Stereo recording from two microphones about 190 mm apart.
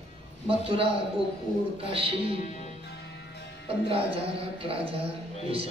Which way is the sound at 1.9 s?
30° right (ahead or behind).